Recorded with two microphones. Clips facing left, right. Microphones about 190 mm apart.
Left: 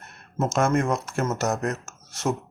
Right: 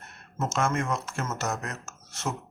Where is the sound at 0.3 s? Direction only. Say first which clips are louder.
Left 5 dB; 40° left (ahead or behind).